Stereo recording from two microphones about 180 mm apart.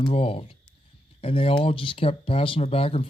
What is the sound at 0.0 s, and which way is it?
Speech, 30° left (ahead or behind).